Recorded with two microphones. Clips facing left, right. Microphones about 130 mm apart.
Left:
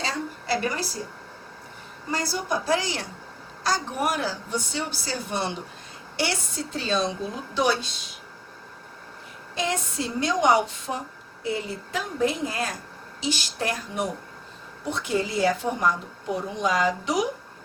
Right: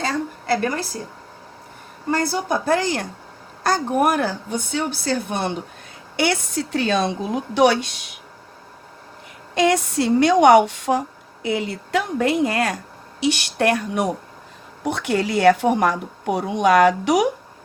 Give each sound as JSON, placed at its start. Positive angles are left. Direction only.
{"t": 0.0, "sound": "a sound", "side_deg": -50}
{"t": 2.0, "sound": "a woman's voice", "side_deg": -55}
{"t": 9.6, "sound": "a woman's voice", "side_deg": -75}